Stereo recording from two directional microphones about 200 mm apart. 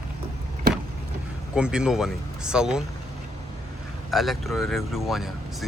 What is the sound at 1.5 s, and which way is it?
Speech, 5° right (ahead or behind).